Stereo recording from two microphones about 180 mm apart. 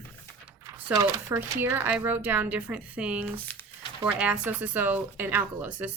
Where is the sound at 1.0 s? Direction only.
10° right (ahead or behind).